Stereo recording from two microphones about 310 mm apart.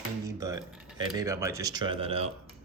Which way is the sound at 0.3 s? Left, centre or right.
Centre.